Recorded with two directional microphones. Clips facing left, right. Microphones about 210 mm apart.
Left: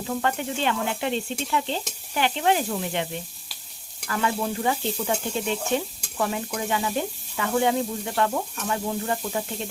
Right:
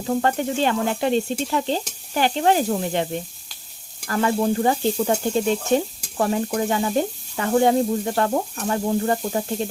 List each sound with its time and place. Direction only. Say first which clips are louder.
0.1 s frying: right 6 dB; 40° right (ahead or behind)